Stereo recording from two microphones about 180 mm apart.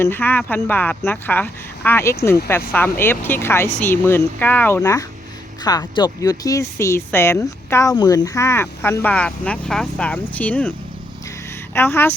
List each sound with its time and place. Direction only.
0.0 s speech: 10° left (ahead or behind)